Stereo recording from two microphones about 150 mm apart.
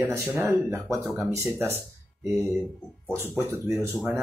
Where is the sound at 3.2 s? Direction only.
15° right (ahead or behind).